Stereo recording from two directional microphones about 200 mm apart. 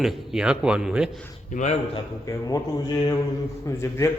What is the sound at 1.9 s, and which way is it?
Speech, 15° left (ahead or behind).